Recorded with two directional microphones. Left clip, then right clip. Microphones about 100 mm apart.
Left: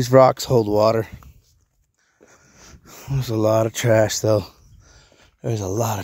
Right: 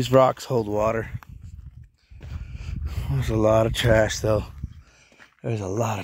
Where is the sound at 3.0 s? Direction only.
5° left (ahead or behind).